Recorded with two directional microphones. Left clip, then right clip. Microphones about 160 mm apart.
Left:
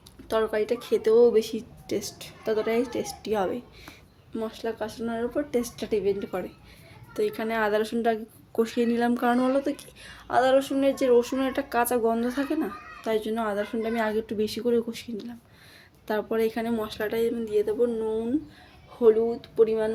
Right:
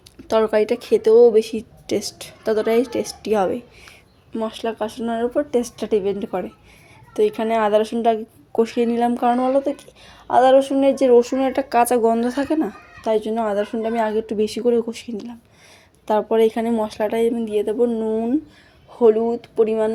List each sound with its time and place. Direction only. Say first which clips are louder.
0.3 s a woman's voice: right 8 dB; 50° right (ahead or behind)
4.4 s speech: right 7 dB; 50° right (ahead or behind)
7.1 s a woman's voice: right 9 dB; 30° right (ahead or behind)